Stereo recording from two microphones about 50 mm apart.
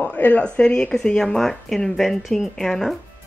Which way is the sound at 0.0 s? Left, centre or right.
Left.